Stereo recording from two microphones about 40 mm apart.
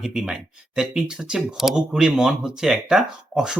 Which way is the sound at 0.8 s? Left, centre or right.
Centre.